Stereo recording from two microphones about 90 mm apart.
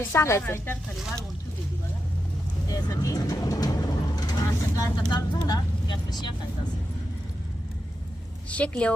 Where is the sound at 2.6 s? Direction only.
40° left (ahead or behind).